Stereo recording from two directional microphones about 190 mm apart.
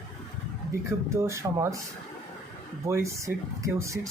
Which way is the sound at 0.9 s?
15° right (ahead or behind).